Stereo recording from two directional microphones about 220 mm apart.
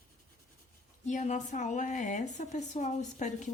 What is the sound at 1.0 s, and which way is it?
A woman's voice, 30° left (ahead or behind).